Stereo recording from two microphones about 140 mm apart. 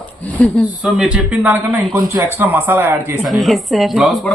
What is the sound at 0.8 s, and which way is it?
Speech, 5° right (ahead or behind).